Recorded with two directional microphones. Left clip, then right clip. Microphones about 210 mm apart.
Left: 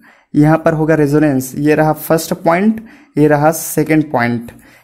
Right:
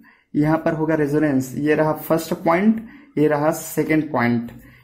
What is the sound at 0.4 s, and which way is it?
Speech, 45° left (ahead or behind).